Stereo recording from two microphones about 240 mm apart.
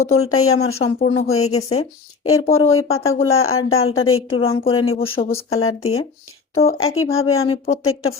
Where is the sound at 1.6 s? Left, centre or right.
Left.